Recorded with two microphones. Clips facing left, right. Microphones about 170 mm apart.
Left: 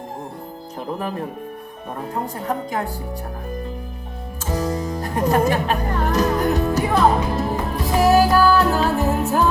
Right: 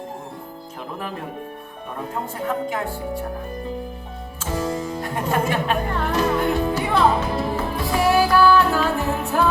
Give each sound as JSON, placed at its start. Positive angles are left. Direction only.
{"t": 2.5, "sound": "speech", "side_deg": 40}
{"t": 4.5, "sound": "music", "side_deg": 40}